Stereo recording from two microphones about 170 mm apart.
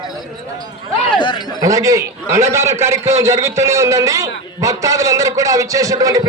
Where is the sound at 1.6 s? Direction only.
20° right (ahead or behind).